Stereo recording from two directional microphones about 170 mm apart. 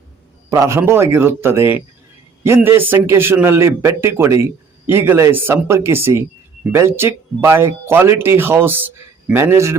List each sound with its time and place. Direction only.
0.5 s speech: 15° right (ahead or behind)